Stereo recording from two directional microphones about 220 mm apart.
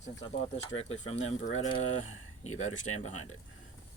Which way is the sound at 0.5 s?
30° left (ahead or behind).